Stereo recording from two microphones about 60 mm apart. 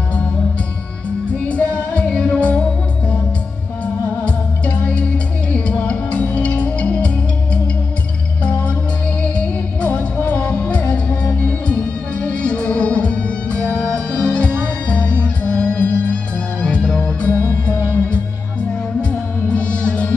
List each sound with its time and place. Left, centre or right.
1.3 s music: left
3.8 s music: left
8.5 s music: centre
18.9 s music: centre